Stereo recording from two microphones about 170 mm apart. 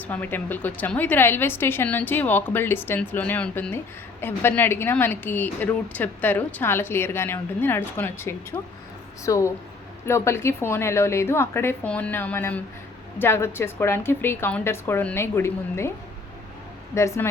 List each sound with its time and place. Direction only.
0.0 s a woman's voice: 10° left (ahead or behind)
16.9 s a woman's voice: 15° left (ahead or behind)